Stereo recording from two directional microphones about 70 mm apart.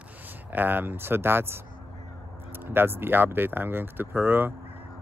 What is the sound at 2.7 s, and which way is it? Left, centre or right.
Speech, right.